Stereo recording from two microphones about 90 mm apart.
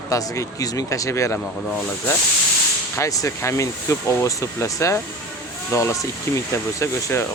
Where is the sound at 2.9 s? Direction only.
35° left (ahead or behind).